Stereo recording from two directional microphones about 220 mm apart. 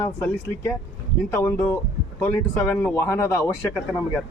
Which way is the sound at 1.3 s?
10° left (ahead or behind).